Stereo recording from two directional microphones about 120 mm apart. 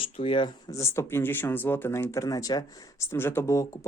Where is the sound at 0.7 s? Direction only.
25° left (ahead or behind).